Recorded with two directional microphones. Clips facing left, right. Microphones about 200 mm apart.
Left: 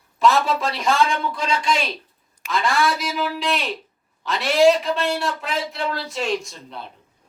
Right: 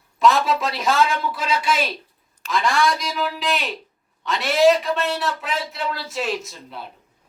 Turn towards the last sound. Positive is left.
turn(degrees=-5)  # may be behind; listen again after turning